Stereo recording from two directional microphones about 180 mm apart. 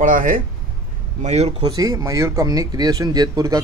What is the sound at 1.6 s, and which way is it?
Speech, 20° right (ahead or behind).